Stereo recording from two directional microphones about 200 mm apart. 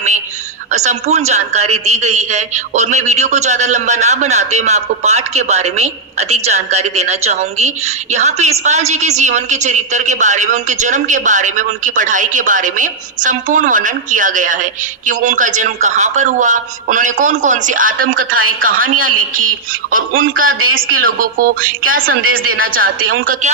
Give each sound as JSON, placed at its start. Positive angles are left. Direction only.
{"t": 0.7, "sound": "a man's voice", "side_deg": -35}
{"t": 20.5, "sound": "speech", "side_deg": -90}
{"t": 21.0, "sound": "speech", "side_deg": -45}
{"t": 22.2, "sound": "speech", "side_deg": -90}
{"t": 22.5, "sound": "speech", "side_deg": -45}